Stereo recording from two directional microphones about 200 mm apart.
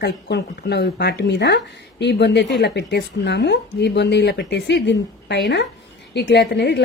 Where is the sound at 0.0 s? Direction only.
55° left (ahead or behind).